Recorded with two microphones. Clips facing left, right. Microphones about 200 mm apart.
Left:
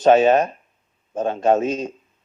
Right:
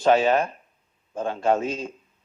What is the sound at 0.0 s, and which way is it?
Speech, 20° left (ahead or behind).